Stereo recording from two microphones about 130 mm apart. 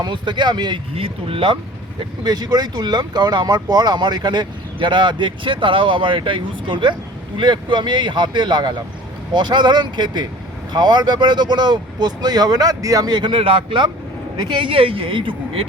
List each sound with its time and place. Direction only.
0.0 s speech: 35° right (ahead or behind)
2.0 s speech: 30° right (ahead or behind)